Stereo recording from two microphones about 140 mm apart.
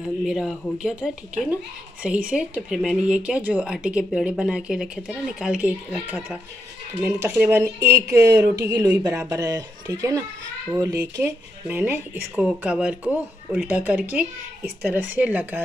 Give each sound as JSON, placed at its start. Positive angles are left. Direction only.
{"t": 0.3, "sound": "speech", "side_deg": -5}